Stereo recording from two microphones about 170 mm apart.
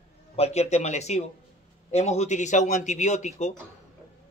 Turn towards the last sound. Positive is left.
turn(degrees=40)  # may be behind; listen again after turning